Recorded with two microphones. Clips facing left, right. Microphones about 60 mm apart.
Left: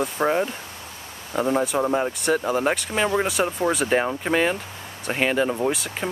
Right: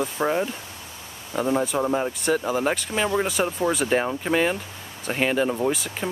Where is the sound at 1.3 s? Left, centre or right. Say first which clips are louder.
Left 1 dB; centre.